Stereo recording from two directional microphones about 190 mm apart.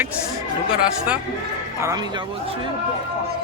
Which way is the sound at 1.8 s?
20° right (ahead or behind).